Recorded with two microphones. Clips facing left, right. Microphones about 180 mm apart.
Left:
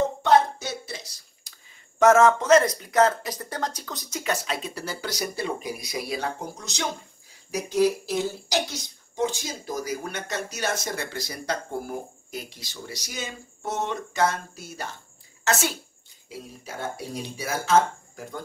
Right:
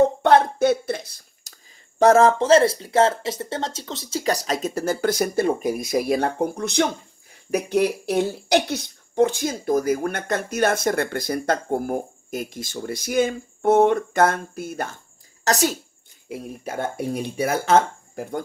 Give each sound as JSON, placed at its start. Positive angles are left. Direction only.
{"t": 0.2, "sound": "speech", "side_deg": -55}
{"t": 15.4, "sound": "speech", "side_deg": -40}
{"t": 16.3, "sound": "speech", "side_deg": -55}